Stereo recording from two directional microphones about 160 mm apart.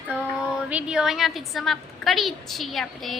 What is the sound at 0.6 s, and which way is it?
A woman's voice, 5° right (ahead or behind).